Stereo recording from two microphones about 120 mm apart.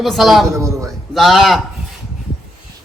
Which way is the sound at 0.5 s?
25° right (ahead or behind).